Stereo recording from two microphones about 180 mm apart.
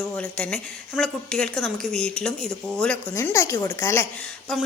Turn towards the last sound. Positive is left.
turn(degrees=0)  # may be behind; listen again after turning